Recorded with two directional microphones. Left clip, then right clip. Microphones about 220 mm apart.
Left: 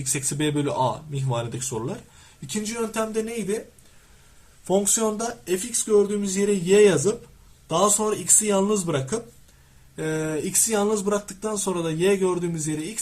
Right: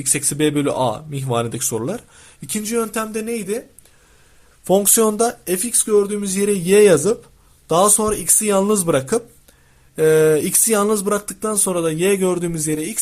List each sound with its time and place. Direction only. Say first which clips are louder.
0.0 s speech: right 7 dB; 40° right (ahead or behind)
4.6 s speech: right 7 dB; 40° right (ahead or behind)